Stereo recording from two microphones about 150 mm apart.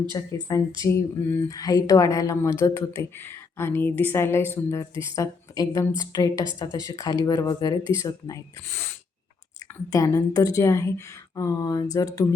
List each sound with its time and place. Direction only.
0.1 s a woman's voice: 25° left (ahead or behind)